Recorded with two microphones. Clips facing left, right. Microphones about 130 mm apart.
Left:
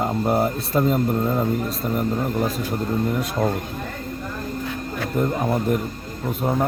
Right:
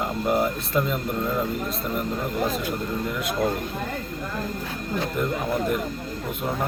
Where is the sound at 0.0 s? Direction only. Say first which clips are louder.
Left 3 dB; 35° left (ahead or behind).